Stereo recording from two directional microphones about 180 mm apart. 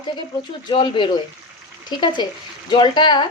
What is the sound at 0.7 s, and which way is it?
A woman's voice, 25° left (ahead or behind).